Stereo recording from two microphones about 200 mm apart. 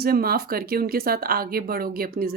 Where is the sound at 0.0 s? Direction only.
50° right (ahead or behind).